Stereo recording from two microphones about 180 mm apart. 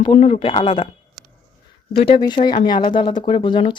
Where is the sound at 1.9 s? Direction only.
30° left (ahead or behind).